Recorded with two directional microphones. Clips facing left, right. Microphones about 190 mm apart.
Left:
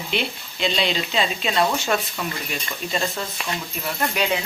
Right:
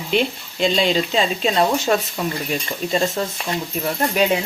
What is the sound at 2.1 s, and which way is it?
Speech, 25° right (ahead or behind).